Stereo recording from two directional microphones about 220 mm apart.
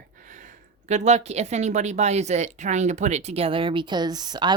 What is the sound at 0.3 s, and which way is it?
Speech, 35° right (ahead or behind).